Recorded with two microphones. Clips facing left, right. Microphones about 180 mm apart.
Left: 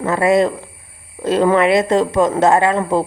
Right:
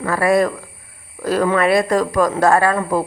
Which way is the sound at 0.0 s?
20° left (ahead or behind).